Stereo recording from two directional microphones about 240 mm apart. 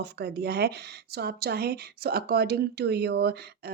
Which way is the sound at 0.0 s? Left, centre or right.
Right.